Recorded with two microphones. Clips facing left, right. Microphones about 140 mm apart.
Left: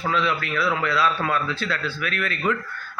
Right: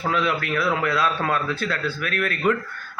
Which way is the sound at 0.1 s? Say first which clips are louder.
Right 1 dB; 50° right (ahead or behind).